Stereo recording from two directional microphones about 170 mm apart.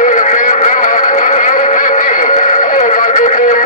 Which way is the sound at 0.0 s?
45° left (ahead or behind).